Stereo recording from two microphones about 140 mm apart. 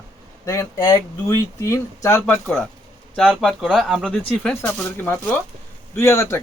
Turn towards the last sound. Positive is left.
turn(degrees=20)  # may be behind; listen again after turning